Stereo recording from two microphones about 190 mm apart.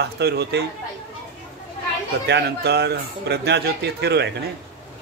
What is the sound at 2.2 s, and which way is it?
Speech, 60° right (ahead or behind).